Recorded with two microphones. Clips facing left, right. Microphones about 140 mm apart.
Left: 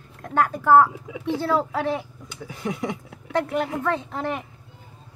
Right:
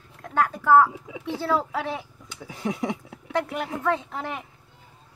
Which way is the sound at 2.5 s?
30° right (ahead or behind).